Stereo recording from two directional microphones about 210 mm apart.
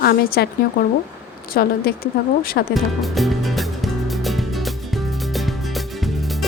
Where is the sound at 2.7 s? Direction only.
Centre (ahead or behind).